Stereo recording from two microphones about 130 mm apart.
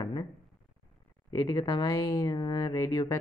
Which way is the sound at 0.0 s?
30° left (ahead or behind).